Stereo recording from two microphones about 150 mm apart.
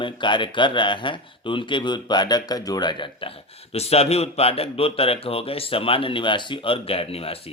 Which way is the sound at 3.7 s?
45° left (ahead or behind).